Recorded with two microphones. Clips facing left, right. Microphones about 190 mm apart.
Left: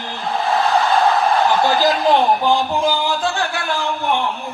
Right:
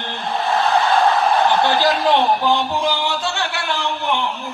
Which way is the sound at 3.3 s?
Centre (ahead or behind).